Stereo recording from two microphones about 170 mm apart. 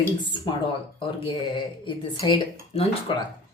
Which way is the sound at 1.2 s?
30° left (ahead or behind).